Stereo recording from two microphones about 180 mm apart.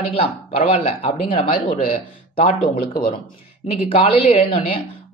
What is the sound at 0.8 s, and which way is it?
Speech, 30° left (ahead or behind).